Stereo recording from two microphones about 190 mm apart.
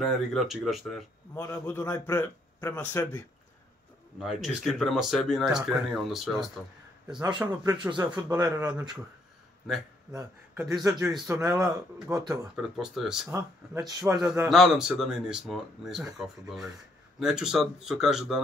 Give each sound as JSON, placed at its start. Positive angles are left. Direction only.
{"t": 0.0, "sound": "speech", "side_deg": 0}
{"t": 1.3, "sound": "a man's voice", "side_deg": 15}
{"t": 4.2, "sound": "speech", "side_deg": 0}
{"t": 7.4, "sound": "a man's voice", "side_deg": -20}
{"t": 10.1, "sound": "a man's voice", "side_deg": -10}
{"t": 12.5, "sound": "speech", "side_deg": 0}
{"t": 13.3, "sound": "a man's voice", "side_deg": -15}
{"t": 14.5, "sound": "speech", "side_deg": 0}